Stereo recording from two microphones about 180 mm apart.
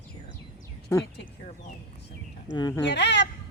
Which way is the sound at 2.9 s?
75° left (ahead or behind).